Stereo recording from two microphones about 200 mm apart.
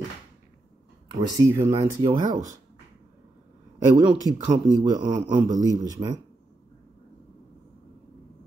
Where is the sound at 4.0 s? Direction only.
20° right (ahead or behind).